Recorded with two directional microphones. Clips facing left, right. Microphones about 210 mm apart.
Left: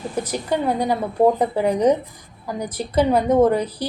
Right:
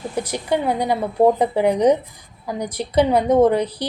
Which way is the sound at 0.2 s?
10° right (ahead or behind).